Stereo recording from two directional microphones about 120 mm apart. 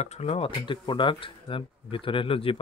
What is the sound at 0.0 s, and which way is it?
Speech, 65° left (ahead or behind).